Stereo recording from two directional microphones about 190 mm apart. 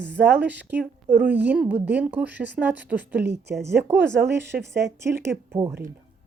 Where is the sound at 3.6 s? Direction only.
10° right (ahead or behind).